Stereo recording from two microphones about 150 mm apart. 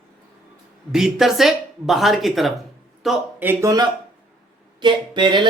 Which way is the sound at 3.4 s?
15° right (ahead or behind).